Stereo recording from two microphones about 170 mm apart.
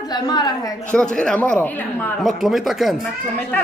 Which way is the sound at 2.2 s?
Centre (ahead or behind).